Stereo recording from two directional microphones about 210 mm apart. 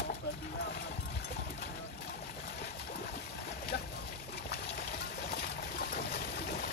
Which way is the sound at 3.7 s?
55° left (ahead or behind).